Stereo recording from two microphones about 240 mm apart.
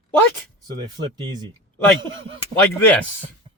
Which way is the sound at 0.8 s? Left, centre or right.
Centre.